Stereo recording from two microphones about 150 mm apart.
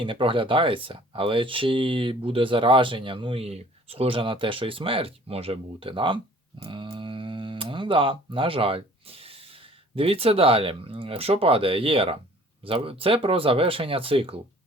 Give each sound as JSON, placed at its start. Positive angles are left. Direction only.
{"t": 0.0, "sound": "speech", "side_deg": -35}